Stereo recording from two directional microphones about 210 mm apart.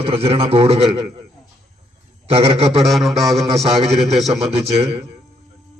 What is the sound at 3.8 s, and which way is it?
Speech, 30° right (ahead or behind).